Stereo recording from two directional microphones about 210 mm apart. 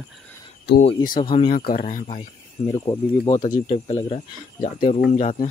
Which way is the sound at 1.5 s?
40° left (ahead or behind).